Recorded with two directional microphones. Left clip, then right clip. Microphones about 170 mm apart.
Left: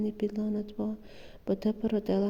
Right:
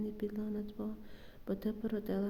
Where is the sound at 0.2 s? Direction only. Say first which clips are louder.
Left 7 dB; 35° left (ahead or behind).